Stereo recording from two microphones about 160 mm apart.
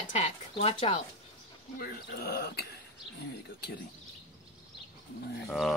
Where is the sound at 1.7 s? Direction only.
70° left (ahead or behind).